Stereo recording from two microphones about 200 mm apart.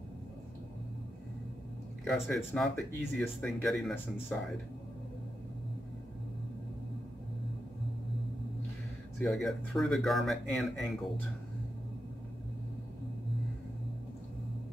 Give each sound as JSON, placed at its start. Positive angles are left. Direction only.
{"t": 2.0, "sound": "speech", "side_deg": 5}
{"t": 9.2, "sound": "speech", "side_deg": 0}